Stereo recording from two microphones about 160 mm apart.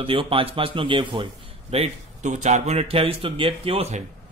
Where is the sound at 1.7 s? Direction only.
45° right (ahead or behind).